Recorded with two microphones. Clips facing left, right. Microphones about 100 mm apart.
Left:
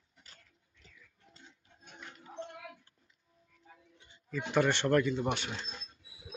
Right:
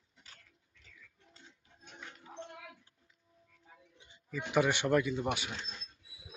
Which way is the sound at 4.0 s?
10° right (ahead or behind).